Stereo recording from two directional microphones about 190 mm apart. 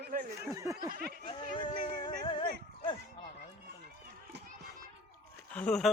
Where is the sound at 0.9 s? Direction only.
55° right (ahead or behind).